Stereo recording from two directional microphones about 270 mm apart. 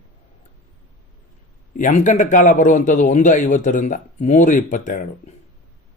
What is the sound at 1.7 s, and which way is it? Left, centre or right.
Speech, left.